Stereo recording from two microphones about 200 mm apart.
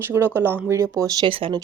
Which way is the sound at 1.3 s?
25° right (ahead or behind).